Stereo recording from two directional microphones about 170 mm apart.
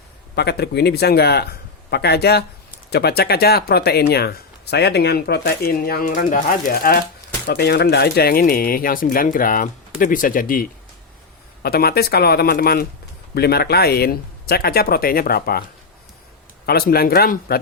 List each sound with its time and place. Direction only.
0.3 s speech: 75° left (ahead or behind); by 10.7 s 55° left (ahead or behind)
11.6 s speech: 65° left (ahead or behind)
16.6 s speech: 65° left (ahead or behind)